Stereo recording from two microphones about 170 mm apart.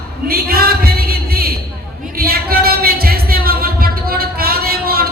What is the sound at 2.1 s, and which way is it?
Music, 60° right (ahead or behind).